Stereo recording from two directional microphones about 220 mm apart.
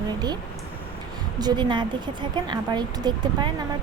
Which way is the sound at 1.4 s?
20° right (ahead or behind).